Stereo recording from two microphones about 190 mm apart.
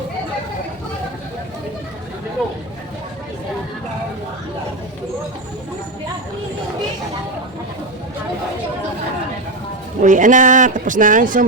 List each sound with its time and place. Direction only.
10.0 s speech: 40° right (ahead or behind)